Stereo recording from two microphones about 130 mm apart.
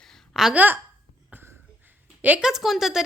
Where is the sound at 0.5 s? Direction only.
15° right (ahead or behind).